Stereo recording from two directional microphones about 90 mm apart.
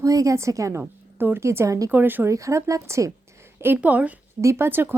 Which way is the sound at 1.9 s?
20° right (ahead or behind).